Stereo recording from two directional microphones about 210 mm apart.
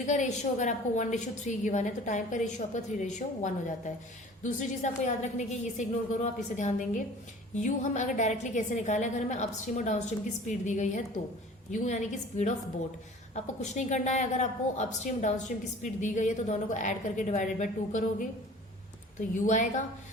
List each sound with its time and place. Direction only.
0.1 s a woman's voice: 35° left (ahead or behind)
19.3 s a woman's voice: 35° left (ahead or behind)